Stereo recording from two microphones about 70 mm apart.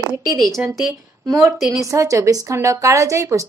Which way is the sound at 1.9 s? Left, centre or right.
Right.